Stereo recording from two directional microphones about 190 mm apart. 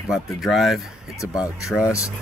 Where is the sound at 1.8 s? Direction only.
15° left (ahead or behind).